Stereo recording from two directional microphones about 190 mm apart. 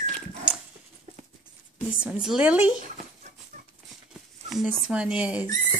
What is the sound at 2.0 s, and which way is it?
Speech, 5° right (ahead or behind).